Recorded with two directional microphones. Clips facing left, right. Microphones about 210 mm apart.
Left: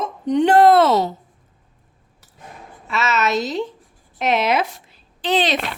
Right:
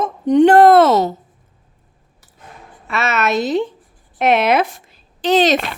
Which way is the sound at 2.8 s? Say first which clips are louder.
Right 2 dB; 60° right (ahead or behind).